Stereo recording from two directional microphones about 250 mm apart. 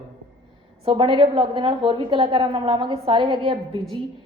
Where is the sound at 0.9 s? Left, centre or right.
Right.